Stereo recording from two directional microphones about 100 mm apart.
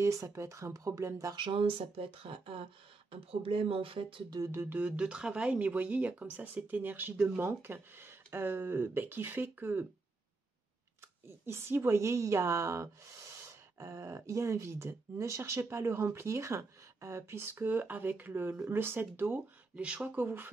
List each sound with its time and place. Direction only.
0.0 s speech: 30° right (ahead or behind)
1.3 s speech: 55° right (ahead or behind)
4.5 s speech: 20° right (ahead or behind)
11.2 s speech: 25° right (ahead or behind)